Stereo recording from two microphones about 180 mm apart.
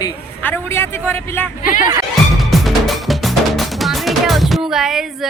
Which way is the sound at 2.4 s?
Centre (ahead or behind).